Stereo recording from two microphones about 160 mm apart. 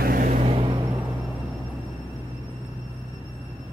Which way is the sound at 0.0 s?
65° right (ahead or behind).